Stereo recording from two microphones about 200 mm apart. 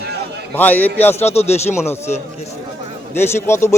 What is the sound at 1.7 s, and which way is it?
Speech, 15° left (ahead or behind).